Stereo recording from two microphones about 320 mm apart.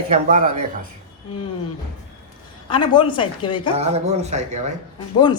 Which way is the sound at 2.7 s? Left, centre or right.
Centre.